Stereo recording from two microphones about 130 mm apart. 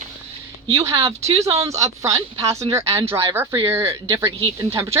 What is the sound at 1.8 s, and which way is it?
Speech, 25° right (ahead or behind).